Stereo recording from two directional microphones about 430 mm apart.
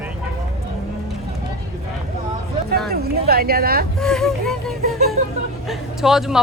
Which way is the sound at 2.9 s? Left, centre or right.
Right.